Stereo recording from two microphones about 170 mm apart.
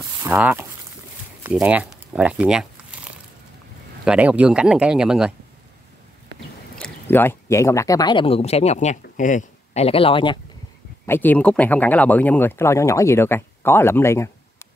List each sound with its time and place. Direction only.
0.2 s speech: 10° right (ahead or behind)
1.4 s crumpling: 5° right (ahead or behind)
4.0 s speech: 5° right (ahead or behind)
6.8 s speech: 10° left (ahead or behind); by 10.4 s 30° left (ahead or behind)
11.1 s speech: 10° left (ahead or behind)